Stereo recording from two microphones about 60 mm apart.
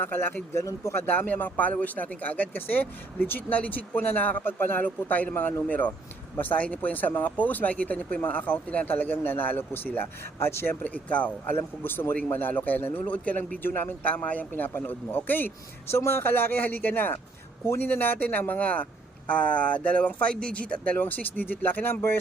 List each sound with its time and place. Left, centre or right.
0.0 s speech: left
0.5 s speech: left
0.9 s speech: left
10.8 s speech: left
11.5 s speech: left